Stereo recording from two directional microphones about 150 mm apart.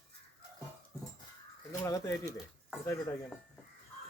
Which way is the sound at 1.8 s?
20° left (ahead or behind).